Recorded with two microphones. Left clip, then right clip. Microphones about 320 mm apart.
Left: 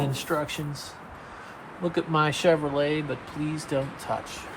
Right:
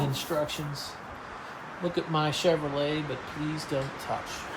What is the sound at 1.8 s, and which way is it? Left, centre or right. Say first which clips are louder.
Speech: left 4 dB; left.